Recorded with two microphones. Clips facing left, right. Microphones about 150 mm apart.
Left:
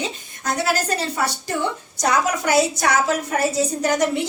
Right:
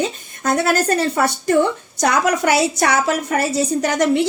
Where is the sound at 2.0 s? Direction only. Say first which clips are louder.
Right 3 dB; 70° right (ahead or behind).